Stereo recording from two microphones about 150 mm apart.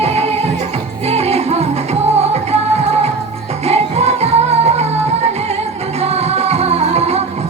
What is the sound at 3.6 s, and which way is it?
Music, 45° right (ahead or behind).